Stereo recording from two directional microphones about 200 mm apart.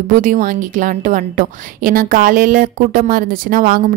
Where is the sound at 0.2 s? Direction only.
40° right (ahead or behind).